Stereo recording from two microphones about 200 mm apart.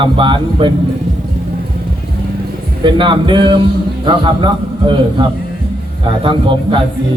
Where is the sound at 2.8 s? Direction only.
25° right (ahead or behind).